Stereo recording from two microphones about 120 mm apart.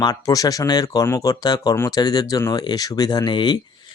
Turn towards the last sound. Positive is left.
turn(degrees=40)  # may be behind; listen again after turning